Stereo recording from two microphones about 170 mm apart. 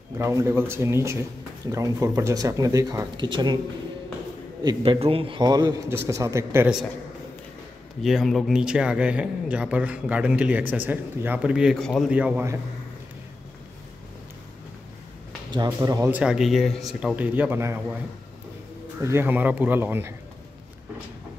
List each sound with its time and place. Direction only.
0.2 s a man's voice: 15° right (ahead or behind)
4.6 s a man's voice: 35° right (ahead or behind); by 6.7 s 15° right (ahead or behind)
8.0 s speech: centre (ahead or behind)
15.5 s a man's voice: 25° right (ahead or behind)
16.2 s speech: 5° right (ahead or behind)
18.9 s speech: 15° right (ahead or behind)